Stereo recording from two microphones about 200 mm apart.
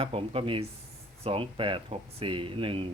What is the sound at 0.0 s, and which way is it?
Speech, 30° right (ahead or behind).